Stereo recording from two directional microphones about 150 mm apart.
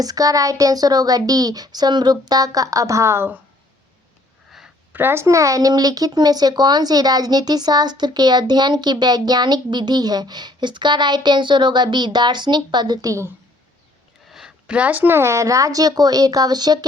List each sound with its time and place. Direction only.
0.0 s speech: 25° right (ahead or behind)
4.5 s a sound: 5° right (ahead or behind)
4.9 s speech: 15° right (ahead or behind)
14.3 s speech: 5° right (ahead or behind); by 16.8 s 25° right (ahead or behind)